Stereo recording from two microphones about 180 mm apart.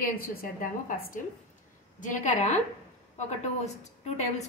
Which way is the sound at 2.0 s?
45° left (ahead or behind).